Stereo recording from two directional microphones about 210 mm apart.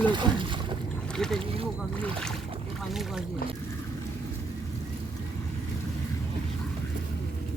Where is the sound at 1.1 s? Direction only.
5° left (ahead or behind).